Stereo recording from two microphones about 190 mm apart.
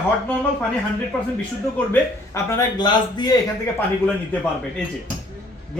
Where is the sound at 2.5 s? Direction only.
20° left (ahead or behind).